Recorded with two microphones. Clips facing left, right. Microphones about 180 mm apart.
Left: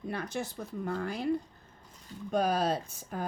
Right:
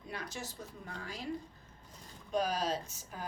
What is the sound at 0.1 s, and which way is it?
Speech, 60° left (ahead or behind).